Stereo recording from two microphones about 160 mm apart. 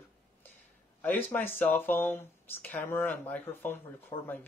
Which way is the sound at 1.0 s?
10° left (ahead or behind).